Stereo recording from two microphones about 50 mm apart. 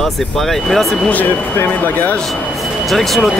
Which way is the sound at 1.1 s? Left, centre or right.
Left.